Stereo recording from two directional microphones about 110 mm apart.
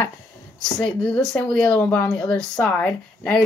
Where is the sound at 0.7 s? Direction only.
5° left (ahead or behind).